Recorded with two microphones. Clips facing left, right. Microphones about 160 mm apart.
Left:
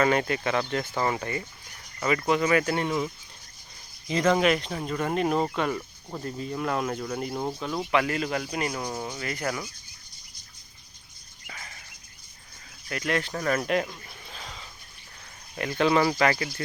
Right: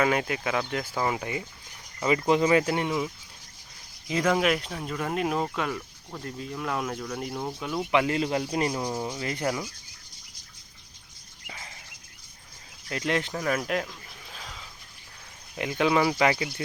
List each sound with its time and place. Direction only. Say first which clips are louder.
0.0 s speech: left 2 dB; 5° right (ahead or behind)
2.0 s speech: right 2 dB; 20° right (ahead or behind)
4.1 s speech: left 2 dB; 5° right (ahead or behind)
7.9 s speech: right 2 dB; 25° right (ahead or behind)
8.8 s speech: right 2 dB; 5° right (ahead or behind)
9.1 s speech: right 2 dB; 25° right (ahead or behind)
12.9 s speech: even; 25° right (ahead or behind)
13.3 s a sound: left 2 dB; 5° right (ahead or behind)
15.5 s speech: left 1 dB; 15° right (ahead or behind)